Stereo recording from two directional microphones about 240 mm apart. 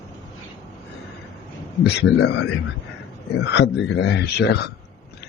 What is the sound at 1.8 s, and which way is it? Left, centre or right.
A man's voice, left.